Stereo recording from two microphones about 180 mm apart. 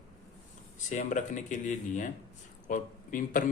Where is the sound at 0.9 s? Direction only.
45° left (ahead or behind).